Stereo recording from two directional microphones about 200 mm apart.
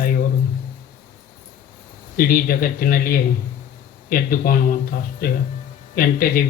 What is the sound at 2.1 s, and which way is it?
A man's voice, 45° left (ahead or behind).